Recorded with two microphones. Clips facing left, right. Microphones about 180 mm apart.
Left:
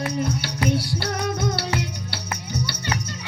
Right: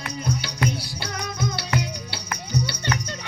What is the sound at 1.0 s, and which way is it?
Music, 60° left (ahead or behind).